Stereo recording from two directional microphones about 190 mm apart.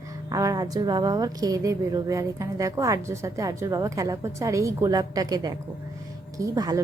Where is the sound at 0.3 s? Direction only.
20° right (ahead or behind).